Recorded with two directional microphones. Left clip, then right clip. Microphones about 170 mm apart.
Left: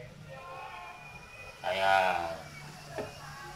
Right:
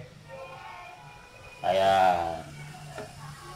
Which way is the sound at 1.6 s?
40° right (ahead or behind).